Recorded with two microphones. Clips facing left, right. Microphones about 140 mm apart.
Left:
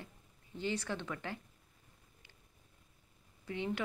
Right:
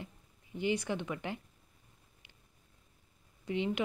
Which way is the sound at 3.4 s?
15° right (ahead or behind).